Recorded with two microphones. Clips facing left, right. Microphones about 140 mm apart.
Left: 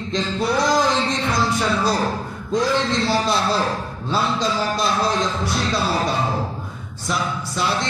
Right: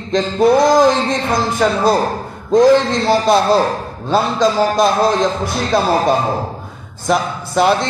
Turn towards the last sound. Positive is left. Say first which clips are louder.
# right 9 dB
turn(degrees=-55)  # may be behind; listen again after turning